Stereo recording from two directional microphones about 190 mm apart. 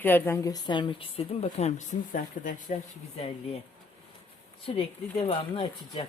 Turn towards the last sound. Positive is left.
turn(degrees=25)  # may be behind; listen again after turning